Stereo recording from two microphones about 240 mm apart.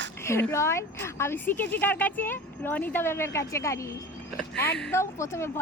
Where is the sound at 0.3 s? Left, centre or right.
Centre.